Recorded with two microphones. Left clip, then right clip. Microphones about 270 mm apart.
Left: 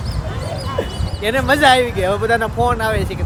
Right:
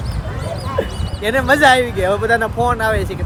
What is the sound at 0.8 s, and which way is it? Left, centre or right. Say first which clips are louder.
Speech: right 2 dB; centre.